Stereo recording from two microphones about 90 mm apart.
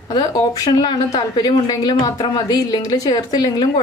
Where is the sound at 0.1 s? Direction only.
50° left (ahead or behind).